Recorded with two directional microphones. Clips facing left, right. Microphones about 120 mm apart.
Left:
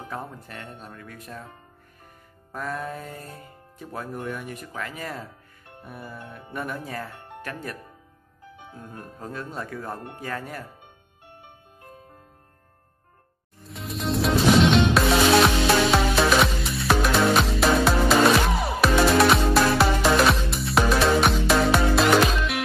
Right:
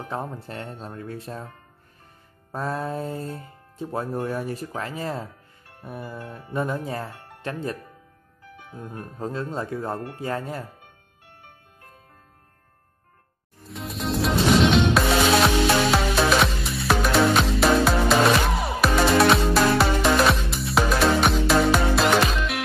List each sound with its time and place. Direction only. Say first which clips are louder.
0.1 s speech: right 5 dB; 25° right (ahead or behind)
2.5 s speech: right 4 dB; 30° right (ahead or behind)
8.7 s speech: right 5 dB; 20° right (ahead or behind)
13.7 s music: even; centre (ahead or behind)